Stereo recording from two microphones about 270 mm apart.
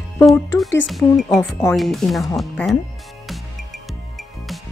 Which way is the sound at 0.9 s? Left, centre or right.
Centre.